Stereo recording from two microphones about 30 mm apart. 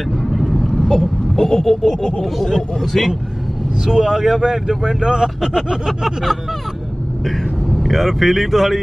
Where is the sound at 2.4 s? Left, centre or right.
Centre.